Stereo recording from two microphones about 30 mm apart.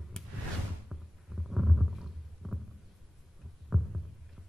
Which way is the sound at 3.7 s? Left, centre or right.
Centre.